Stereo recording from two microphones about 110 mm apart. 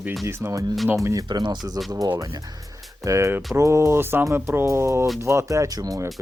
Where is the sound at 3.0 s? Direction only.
25° right (ahead or behind).